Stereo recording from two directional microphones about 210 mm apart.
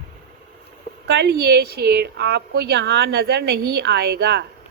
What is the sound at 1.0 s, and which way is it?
Speech, 50° right (ahead or behind).